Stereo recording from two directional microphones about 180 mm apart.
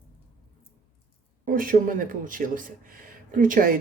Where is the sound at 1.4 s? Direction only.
50° right (ahead or behind).